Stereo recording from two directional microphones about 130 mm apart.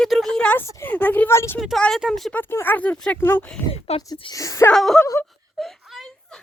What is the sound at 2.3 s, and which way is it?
A woman's voice, 15° left (ahead or behind).